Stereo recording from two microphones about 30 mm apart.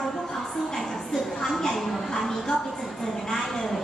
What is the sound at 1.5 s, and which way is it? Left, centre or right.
Speech, centre.